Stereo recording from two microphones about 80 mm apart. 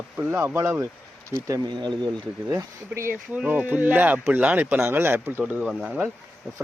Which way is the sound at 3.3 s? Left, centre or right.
Centre.